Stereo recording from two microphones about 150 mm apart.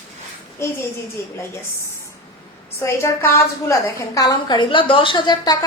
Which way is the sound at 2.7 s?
20° left (ahead or behind).